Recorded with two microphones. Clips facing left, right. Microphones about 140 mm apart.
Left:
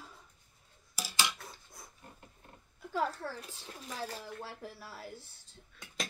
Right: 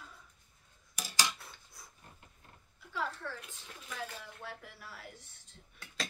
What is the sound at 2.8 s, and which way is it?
Speech, 40° left (ahead or behind).